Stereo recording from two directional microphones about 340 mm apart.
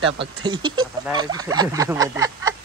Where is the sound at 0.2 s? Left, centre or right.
Centre.